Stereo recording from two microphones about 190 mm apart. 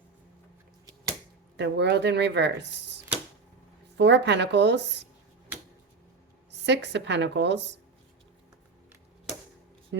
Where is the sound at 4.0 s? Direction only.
65° right (ahead or behind).